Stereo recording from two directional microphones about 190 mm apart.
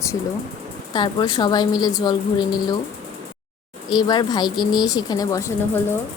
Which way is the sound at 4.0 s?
20° left (ahead or behind).